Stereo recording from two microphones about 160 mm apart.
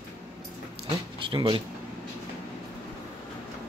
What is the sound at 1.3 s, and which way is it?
Speech, 30° right (ahead or behind).